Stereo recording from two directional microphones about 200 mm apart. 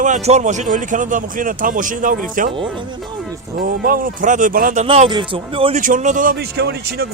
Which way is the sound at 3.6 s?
45° right (ahead or behind).